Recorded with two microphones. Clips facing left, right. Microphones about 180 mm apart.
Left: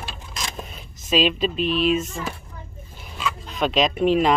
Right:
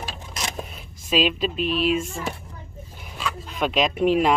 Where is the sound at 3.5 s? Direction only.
5° right (ahead or behind).